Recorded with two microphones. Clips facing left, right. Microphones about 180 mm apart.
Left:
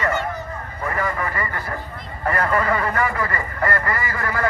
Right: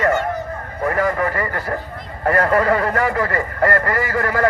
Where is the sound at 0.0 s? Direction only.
50° right (ahead or behind).